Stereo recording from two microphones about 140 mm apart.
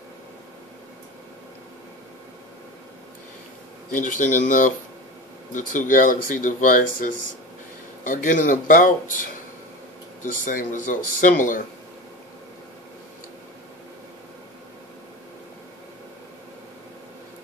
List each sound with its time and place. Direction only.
3.9 s speech: 65° left (ahead or behind)